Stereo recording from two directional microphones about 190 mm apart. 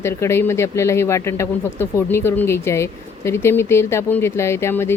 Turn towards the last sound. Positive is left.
turn(degrees=15)  # may be behind; listen again after turning